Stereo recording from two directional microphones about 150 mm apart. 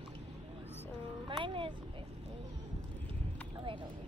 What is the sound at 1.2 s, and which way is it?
Speech, 35° right (ahead or behind).